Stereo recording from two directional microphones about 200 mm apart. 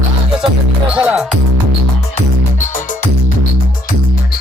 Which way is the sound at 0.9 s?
5° right (ahead or behind).